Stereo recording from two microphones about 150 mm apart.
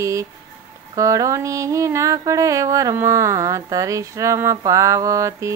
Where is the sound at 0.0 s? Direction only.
20° right (ahead or behind).